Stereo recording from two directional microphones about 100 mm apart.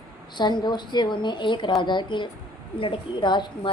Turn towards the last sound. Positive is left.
turn(degrees=50)  # may be behind; listen again after turning